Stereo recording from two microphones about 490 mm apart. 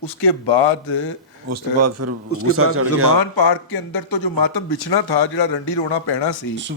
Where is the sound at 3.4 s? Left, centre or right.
Left.